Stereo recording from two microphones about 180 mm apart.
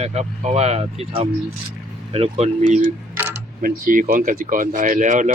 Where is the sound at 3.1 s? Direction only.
10° right (ahead or behind).